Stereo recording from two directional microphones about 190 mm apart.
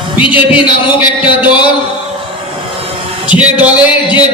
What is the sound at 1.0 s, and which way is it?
Music, 25° left (ahead or behind).